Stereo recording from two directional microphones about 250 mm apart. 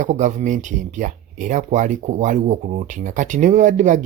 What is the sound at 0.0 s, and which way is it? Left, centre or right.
Speech, right.